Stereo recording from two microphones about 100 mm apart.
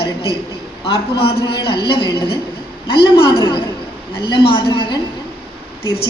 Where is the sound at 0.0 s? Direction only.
65° left (ahead or behind).